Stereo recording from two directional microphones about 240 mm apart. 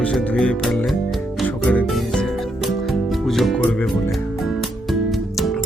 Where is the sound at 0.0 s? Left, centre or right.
Centre.